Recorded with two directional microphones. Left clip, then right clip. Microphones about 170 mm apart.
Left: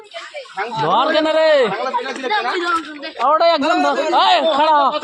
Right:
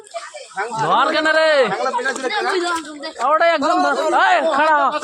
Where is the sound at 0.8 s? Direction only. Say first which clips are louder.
Left 1 dB; 20° left (ahead or behind).